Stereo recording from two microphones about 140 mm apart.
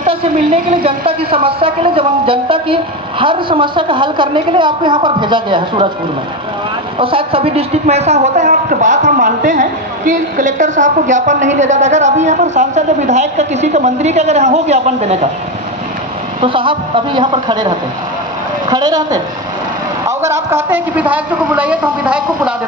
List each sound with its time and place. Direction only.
0.0 s a sound: 40° right (ahead or behind)
0.8 s a woman's voice: 40° right (ahead or behind)
7.0 s speech: 40° right (ahead or behind)
16.3 s a woman's voice: 40° right (ahead or behind); by 22.5 s 10° right (ahead or behind)